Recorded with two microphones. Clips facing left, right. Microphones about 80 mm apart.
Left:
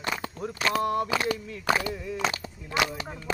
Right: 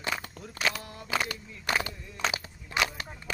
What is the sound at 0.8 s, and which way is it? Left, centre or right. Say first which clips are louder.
Speech: left 19 dB; left.